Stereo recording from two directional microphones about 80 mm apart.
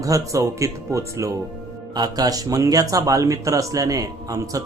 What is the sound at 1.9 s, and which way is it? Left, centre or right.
Speech, right.